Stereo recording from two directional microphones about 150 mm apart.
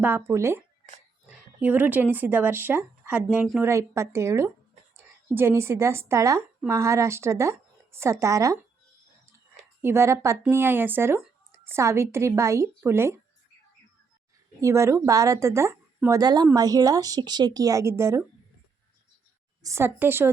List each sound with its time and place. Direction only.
0.0 s speech: 15° right (ahead or behind)
3.6 s speech: 20° right (ahead or behind)
9.8 s speech: 15° right (ahead or behind)
14.6 s speech: 20° right (ahead or behind)
19.6 s speech: 15° right (ahead or behind)